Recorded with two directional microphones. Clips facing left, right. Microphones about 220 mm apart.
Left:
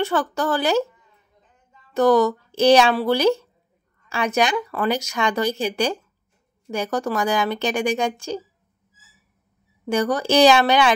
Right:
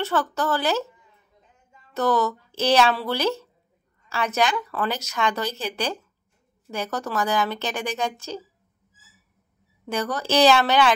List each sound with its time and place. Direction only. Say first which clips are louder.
0.0 s speech: left 3 dB; 15° left (ahead or behind)
2.0 s speech: left 6 dB; 15° left (ahead or behind)
9.8 s speech: left 6 dB; 15° left (ahead or behind)